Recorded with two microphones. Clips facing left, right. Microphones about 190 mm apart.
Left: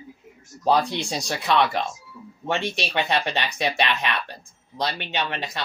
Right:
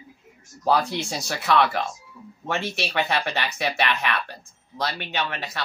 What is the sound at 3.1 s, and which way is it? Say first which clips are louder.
Speech: left 1 dB; 20° left (ahead or behind).